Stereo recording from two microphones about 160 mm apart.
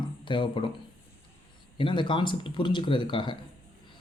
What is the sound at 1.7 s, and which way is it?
Speech, 30° left (ahead or behind).